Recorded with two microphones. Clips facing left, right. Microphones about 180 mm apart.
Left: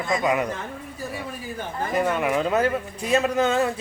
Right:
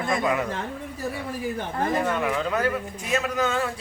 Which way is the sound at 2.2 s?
20° left (ahead or behind).